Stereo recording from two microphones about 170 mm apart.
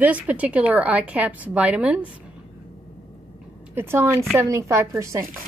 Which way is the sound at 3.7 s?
15° right (ahead or behind).